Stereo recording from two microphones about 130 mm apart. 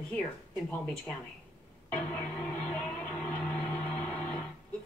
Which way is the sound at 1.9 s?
15° left (ahead or behind).